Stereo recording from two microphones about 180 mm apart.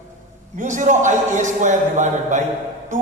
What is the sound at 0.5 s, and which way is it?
A woman's voice, 45° right (ahead or behind).